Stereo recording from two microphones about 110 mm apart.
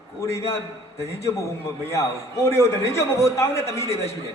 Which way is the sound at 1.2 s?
25° left (ahead or behind).